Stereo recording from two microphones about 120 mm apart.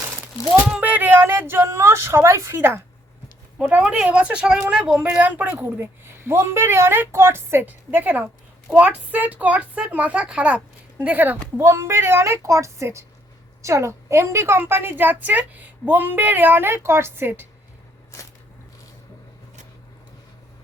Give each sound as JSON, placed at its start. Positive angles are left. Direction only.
{"t": 0.7, "sound": "a woman's voice", "side_deg": -10}